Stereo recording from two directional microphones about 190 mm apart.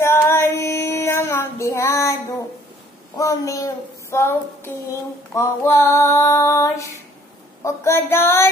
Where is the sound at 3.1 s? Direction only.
15° left (ahead or behind).